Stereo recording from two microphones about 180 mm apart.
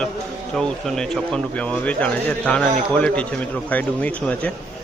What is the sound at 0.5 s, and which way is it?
Speech, 5° left (ahead or behind).